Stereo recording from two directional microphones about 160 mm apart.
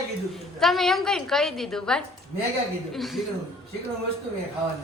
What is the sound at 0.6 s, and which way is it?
A woman's voice, centre (ahead or behind).